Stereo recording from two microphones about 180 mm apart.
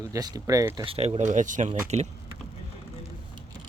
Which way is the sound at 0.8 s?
30° right (ahead or behind).